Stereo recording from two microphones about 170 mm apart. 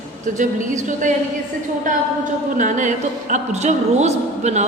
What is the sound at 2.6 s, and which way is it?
A woman's voice, 50° right (ahead or behind).